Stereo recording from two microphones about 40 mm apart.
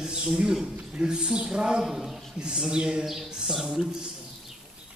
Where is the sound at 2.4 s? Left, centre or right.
Right.